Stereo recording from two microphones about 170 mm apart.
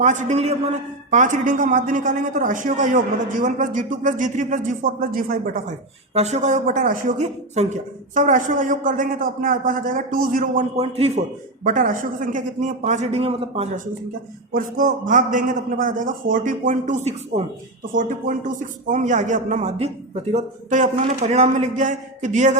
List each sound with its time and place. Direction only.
0.0 s a man's voice: 45° right (ahead or behind)
6.1 s a man's voice: 40° right (ahead or behind)
10.8 s a man's voice: 35° right (ahead or behind)
11.6 s a man's voice: 55° right (ahead or behind); by 13.7 s 35° right (ahead or behind)
14.5 s a man's voice: 55° right (ahead or behind)
17.9 s a man's voice: 50° right (ahead or behind)